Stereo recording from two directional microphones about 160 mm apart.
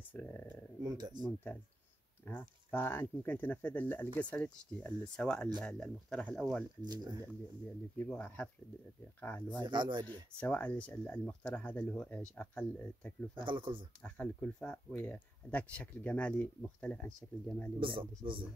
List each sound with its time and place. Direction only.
0.1 s a sound: 15° left (ahead or behind)
0.8 s speech: 25° right (ahead or behind)
2.7 s speech: 15° left (ahead or behind)
6.8 s speech: 25° right (ahead or behind)
8.1 s speech: 10° left (ahead or behind)
9.6 s speech: 30° right (ahead or behind)
10.3 s speech: 10° left (ahead or behind)
13.4 s speech: 30° right (ahead or behind)
14.0 s speech: 10° left (ahead or behind)
17.7 s speech: 30° right (ahead or behind)